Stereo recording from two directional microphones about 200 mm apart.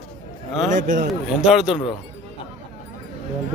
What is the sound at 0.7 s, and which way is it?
Speech, 40° right (ahead or behind).